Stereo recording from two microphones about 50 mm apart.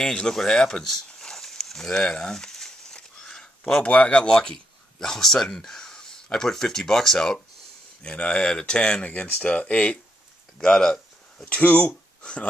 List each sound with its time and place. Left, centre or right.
0.0 s a sound: centre
3.8 s speech: left
10.6 s speech: centre
11.4 s speech: left
12.2 s speech: left